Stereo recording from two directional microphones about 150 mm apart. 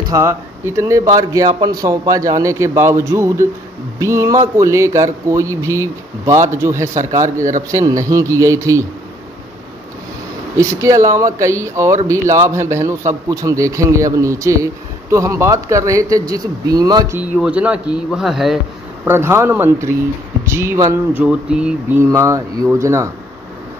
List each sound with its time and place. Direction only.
0.1 s a man's voice: 20° right (ahead or behind)
10.5 s a man's voice: 20° right (ahead or behind)
17.2 s speech: 10° right (ahead or behind)
19.0 s speech: 15° right (ahead or behind)
21.2 s speech: 5° right (ahead or behind)
22.0 s a man's voice: 20° right (ahead or behind)